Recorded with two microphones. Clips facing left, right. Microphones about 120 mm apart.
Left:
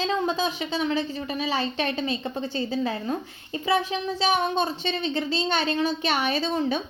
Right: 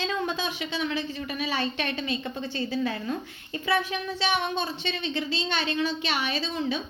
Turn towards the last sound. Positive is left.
turn(degrees=50)  # may be behind; listen again after turning